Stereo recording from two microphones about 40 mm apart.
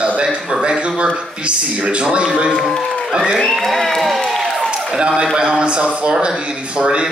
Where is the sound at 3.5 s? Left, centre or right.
Centre.